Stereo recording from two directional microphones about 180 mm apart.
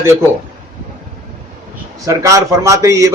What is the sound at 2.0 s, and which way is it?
A man's voice, 20° right (ahead or behind).